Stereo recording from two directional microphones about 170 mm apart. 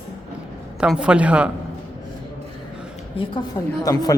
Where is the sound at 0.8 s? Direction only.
5° right (ahead or behind).